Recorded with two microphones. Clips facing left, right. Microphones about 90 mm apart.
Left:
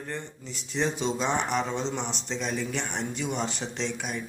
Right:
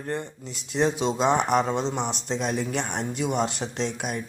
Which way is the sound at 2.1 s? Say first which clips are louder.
Right 4 dB; 55° right (ahead or behind).